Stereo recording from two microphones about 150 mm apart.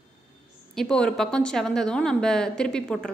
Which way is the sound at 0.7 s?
5° left (ahead or behind).